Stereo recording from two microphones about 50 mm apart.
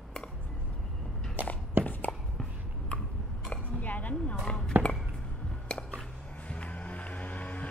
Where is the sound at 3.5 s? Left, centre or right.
Left.